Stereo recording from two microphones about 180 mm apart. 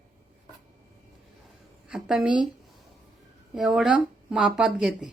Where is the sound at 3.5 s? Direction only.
Centre (ahead or behind).